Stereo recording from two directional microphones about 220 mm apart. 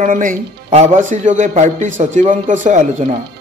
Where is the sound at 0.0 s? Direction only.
35° right (ahead or behind).